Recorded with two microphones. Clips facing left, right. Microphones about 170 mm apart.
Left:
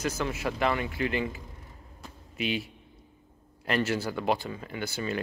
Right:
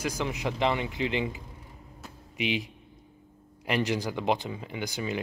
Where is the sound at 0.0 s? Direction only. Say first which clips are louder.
Even; 15° right (ahead or behind).